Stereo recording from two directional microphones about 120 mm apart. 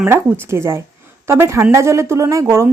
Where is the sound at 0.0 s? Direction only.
15° right (ahead or behind).